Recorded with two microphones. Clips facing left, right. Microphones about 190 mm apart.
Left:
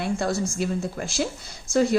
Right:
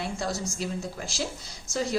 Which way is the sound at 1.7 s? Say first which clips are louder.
Left 9 dB; 60° left (ahead or behind).